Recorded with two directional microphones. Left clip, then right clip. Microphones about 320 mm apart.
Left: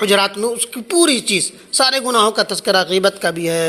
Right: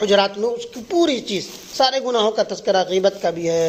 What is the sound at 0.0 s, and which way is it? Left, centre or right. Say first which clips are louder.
A man's voice: left 2 dB; left.